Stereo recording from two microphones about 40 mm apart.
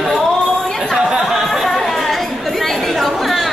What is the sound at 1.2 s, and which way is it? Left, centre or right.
Chatter, centre.